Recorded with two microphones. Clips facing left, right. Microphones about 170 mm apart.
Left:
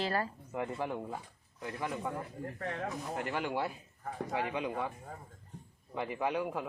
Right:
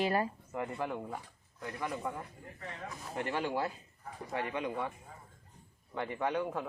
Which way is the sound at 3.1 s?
5° left (ahead or behind).